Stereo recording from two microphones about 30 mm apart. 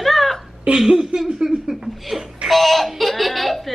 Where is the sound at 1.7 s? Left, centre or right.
Centre.